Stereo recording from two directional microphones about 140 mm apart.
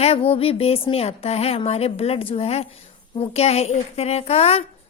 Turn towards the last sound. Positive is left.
turn(degrees=45)  # may be behind; listen again after turning